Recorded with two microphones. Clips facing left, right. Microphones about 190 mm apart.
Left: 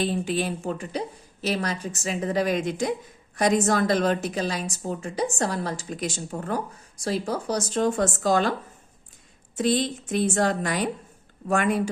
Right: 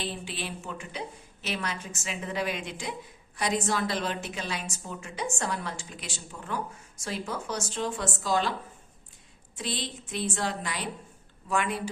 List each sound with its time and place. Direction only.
0.0 s a woman's voice: 45° left (ahead or behind)
6.9 s speech: 35° left (ahead or behind)
9.6 s speech: 45° left (ahead or behind)